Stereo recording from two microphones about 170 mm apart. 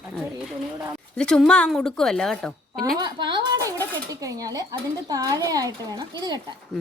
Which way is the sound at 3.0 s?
25° right (ahead or behind).